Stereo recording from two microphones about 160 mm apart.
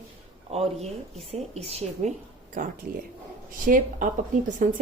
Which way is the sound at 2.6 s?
55° right (ahead or behind).